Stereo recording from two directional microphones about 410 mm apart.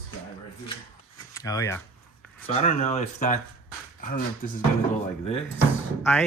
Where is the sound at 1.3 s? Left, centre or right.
Centre.